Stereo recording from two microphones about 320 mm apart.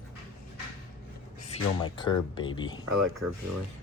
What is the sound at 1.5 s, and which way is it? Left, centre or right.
Speech, centre.